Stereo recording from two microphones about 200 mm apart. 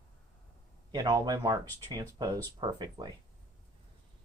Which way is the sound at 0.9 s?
15° right (ahead or behind).